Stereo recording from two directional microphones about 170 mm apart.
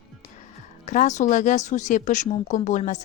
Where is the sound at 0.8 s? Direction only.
45° left (ahead or behind).